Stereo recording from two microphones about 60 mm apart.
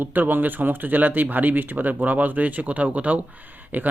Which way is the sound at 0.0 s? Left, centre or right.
Right.